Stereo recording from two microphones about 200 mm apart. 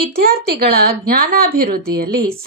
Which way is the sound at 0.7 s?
45° right (ahead or behind).